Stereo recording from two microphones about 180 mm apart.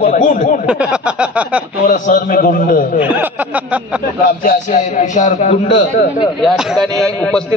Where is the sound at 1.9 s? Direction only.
50° left (ahead or behind).